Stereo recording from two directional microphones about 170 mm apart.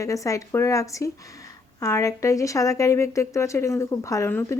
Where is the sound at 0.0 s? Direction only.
20° left (ahead or behind).